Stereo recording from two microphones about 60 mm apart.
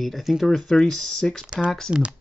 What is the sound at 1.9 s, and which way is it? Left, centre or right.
Speech, right.